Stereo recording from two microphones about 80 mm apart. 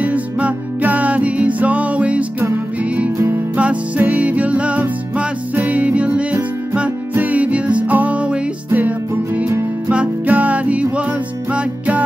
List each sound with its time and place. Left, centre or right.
0.0 s music: centre
3.5 s music: centre
9.8 s music: centre